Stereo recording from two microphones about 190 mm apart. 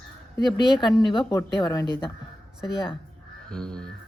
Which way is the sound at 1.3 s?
15° left (ahead or behind).